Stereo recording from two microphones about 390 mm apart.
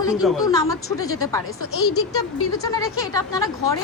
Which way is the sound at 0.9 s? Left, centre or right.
Left.